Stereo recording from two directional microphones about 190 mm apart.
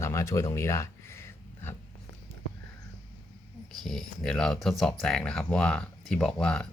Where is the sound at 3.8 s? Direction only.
Centre (ahead or behind).